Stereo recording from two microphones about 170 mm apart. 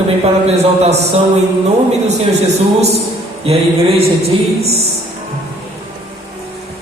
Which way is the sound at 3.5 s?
35° right (ahead or behind).